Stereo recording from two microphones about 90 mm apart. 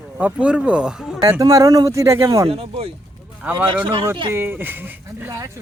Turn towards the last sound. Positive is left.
turn(degrees=-25)  # may be behind; listen again after turning